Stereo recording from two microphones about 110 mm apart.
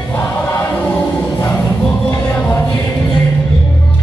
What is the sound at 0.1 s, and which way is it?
Choir, 20° left (ahead or behind).